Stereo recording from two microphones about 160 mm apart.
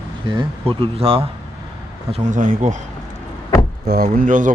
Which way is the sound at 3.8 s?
70° right (ahead or behind).